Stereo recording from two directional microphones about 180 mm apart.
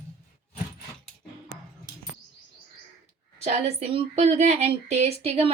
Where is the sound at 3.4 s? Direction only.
35° right (ahead or behind).